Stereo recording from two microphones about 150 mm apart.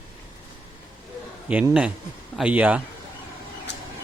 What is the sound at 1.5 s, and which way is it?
Speech, 10° right (ahead or behind).